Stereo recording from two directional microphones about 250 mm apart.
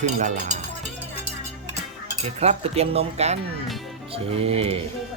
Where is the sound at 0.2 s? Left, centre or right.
Right.